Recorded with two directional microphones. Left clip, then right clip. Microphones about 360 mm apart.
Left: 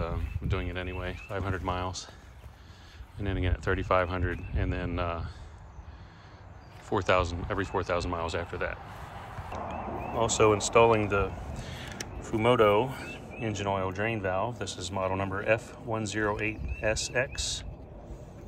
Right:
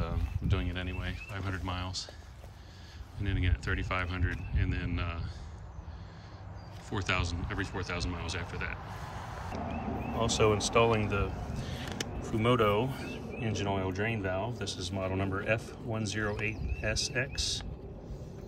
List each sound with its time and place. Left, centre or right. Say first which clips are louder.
0.0 s speech: left 4 dB; centre
3.2 s speech: left 3 dB; centre
6.9 s speech: left 7 dB; centre
9.5 s vehicle: left 3 dB; centre
10.1 s speech: left 4 dB; centre